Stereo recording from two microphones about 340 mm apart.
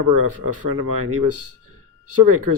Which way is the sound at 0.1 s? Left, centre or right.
Right.